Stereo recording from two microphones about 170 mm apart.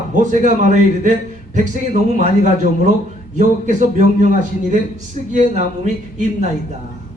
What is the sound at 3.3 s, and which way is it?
A man's voice, 45° right (ahead or behind).